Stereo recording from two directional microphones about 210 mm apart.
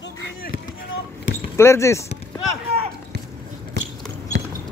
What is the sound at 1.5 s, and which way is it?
Speech, 15° left (ahead or behind).